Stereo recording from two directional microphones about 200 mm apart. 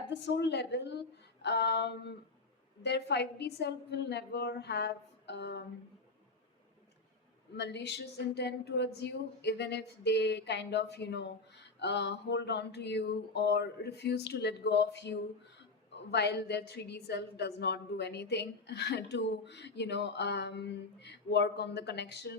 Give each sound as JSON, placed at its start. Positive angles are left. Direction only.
{"t": 0.1, "sound": "speech", "side_deg": 60}
{"t": 7.5, "sound": "speech", "side_deg": 60}